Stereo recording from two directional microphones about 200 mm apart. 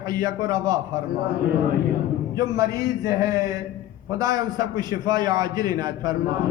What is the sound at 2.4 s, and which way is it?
A man's voice, 20° right (ahead or behind).